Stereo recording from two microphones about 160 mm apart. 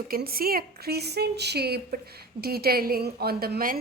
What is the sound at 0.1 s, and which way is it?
A woman's voice, 65° right (ahead or behind).